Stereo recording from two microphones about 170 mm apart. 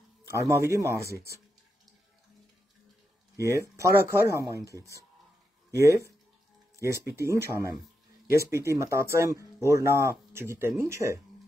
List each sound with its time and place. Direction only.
0.3 s speech: 15° right (ahead or behind)
3.3 s speech: 20° right (ahead or behind)
7.2 s speech: 15° right (ahead or behind)